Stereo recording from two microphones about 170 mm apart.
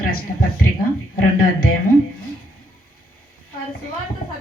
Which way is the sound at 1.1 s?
60° left (ahead or behind).